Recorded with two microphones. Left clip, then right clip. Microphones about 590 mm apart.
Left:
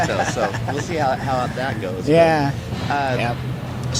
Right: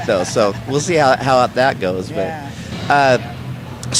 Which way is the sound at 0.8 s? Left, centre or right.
Right.